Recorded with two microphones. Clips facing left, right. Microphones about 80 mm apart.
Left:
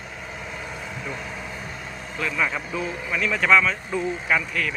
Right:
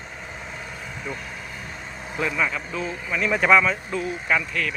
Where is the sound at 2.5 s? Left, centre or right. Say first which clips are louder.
Left 1 dB; centre.